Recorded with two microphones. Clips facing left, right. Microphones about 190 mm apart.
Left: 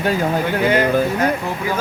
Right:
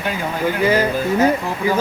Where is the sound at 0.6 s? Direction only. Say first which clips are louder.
Left 1 dB; 5° right (ahead or behind).